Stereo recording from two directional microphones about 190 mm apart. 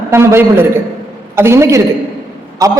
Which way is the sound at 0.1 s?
15° right (ahead or behind).